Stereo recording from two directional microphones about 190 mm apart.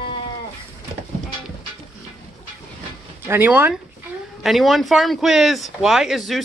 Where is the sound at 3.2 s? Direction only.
10° right (ahead or behind).